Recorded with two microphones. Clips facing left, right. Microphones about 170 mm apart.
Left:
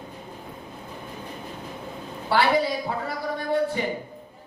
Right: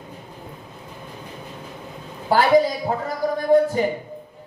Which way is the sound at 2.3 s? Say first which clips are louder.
Right 5 dB; 45° right (ahead or behind).